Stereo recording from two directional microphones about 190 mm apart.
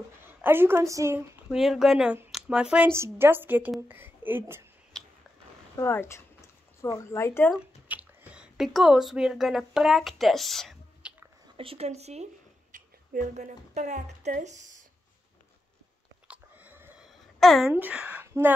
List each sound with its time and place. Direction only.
0.2 s a woman's voice: 10° right (ahead or behind)
1.5 s a woman's voice: centre (ahead or behind)
4.9 s a sound: 5° left (ahead or behind)
5.8 s speech: 15° left (ahead or behind)
7.5 s speech: 5° right (ahead or behind)
11.5 s speech: 30° right (ahead or behind)
12.7 s speech: 45° right (ahead or behind)
16.3 s a sound: 10° right (ahead or behind)
17.1 s speech: centre (ahead or behind)